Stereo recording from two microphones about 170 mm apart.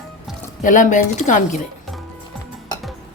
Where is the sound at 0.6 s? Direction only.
50° left (ahead or behind).